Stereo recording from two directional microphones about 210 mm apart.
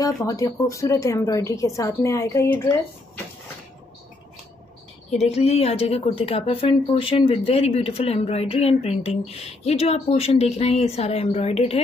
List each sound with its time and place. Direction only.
0.0 s a woman's voice: 15° left (ahead or behind)
5.2 s a woman's voice: 30° left (ahead or behind)